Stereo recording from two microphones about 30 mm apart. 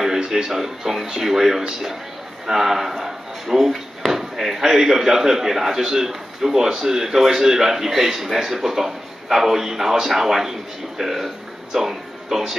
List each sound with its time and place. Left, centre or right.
0.0 s music: centre
0.5 s a man's voice: centre